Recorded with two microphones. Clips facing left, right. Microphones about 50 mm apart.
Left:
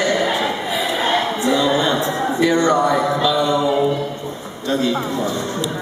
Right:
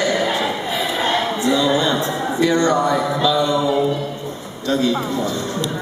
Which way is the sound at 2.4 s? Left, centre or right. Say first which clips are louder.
Left 1 dB; centre.